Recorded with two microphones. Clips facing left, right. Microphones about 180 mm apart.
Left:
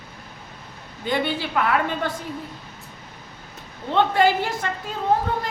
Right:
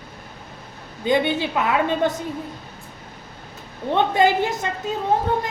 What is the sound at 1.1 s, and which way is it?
A woman's voice, 20° right (ahead or behind).